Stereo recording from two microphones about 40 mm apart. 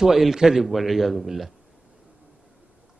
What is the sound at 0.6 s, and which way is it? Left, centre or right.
Speech, centre.